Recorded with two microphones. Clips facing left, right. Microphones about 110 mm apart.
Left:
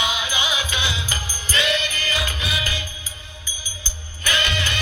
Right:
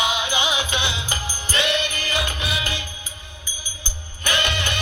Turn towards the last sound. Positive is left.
turn(degrees=-20)  # may be behind; listen again after turning